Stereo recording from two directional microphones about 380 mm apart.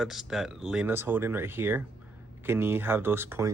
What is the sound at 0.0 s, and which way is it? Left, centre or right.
Speech, centre.